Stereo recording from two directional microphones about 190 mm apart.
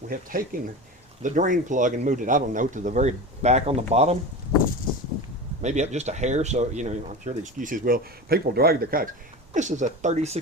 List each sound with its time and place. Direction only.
0.1 s speech: 50° right (ahead or behind)
5.6 s speech: 35° right (ahead or behind)
9.5 s speech: 40° right (ahead or behind)